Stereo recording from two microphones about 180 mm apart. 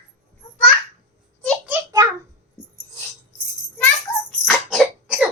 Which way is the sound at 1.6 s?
15° right (ahead or behind).